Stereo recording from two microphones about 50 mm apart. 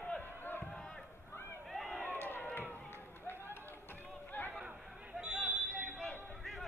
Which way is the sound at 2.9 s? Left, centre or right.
Left.